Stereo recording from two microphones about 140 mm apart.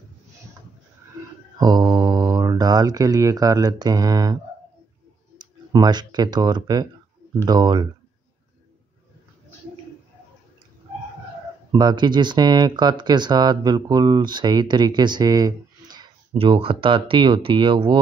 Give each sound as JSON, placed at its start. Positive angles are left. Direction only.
{"t": 1.6, "sound": "speech", "side_deg": -30}
{"t": 5.4, "sound": "speech", "side_deg": -30}
{"t": 11.7, "sound": "speech", "side_deg": -30}